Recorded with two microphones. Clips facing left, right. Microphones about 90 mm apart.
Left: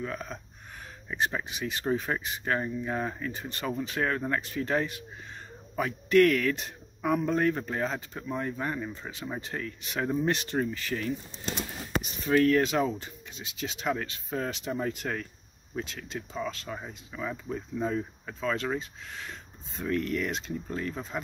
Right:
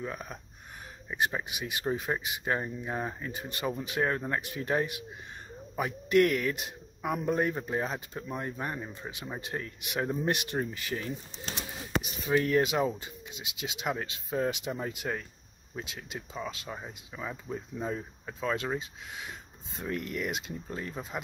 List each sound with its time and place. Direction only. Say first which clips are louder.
0.0 s speech: left 2 dB; 15° right (ahead or behind)